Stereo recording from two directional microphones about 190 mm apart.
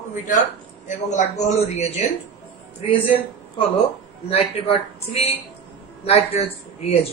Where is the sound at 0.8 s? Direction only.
40° left (ahead or behind).